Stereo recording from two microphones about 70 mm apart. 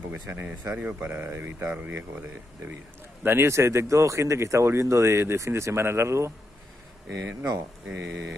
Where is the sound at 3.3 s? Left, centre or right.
Right.